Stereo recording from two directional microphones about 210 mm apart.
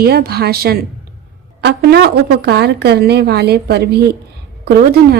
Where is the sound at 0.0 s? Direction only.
45° right (ahead or behind).